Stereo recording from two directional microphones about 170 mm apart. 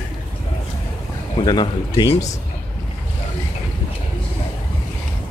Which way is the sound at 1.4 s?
25° left (ahead or behind).